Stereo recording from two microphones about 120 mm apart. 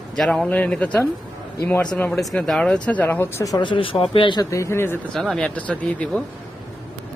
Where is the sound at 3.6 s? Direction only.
45° left (ahead or behind).